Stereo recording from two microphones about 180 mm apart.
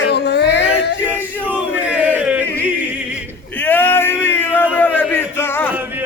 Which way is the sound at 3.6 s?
10° left (ahead or behind).